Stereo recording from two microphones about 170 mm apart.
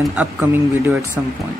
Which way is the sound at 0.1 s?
10° right (ahead or behind).